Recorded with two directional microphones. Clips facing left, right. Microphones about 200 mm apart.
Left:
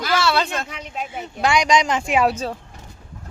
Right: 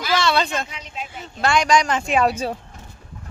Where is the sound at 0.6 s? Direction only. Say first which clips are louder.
Left 4 dB; 55° left (ahead or behind).